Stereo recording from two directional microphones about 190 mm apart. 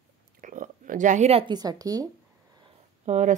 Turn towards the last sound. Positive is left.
turn(degrees=-40)  # may be behind; listen again after turning